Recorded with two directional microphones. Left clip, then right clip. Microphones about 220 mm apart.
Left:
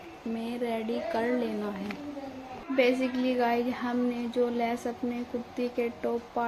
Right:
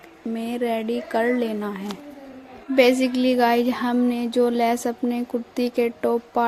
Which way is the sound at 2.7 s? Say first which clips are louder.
Right 8 dB; 50° right (ahead or behind).